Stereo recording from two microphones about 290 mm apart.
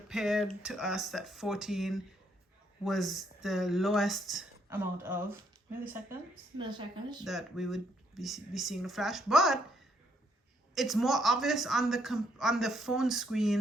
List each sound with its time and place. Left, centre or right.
0.1 s speech: centre
6.6 s a woman's voice: centre
7.3 s speech: centre